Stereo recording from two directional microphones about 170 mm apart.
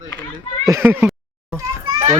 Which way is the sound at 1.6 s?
20° right (ahead or behind).